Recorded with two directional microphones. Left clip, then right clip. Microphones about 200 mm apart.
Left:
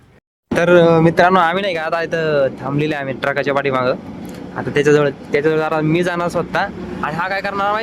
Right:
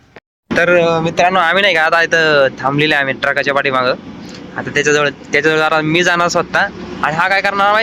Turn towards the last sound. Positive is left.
turn(degrees=0)  # may be behind; listen again after turning